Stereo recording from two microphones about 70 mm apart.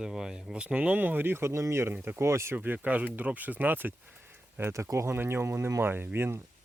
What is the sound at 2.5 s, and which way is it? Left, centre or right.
Speech, right.